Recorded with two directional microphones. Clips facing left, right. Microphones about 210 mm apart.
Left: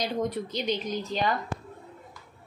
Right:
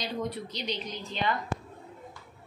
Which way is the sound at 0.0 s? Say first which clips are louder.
Left 4 dB; 50° left (ahead or behind).